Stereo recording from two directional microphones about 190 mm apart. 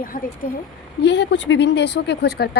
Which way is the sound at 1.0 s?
65° left (ahead or behind).